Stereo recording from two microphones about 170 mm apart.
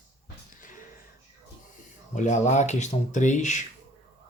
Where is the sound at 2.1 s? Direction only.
45° left (ahead or behind).